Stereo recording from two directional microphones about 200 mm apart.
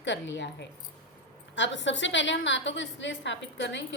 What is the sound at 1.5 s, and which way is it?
A woman's voice, 65° left (ahead or behind).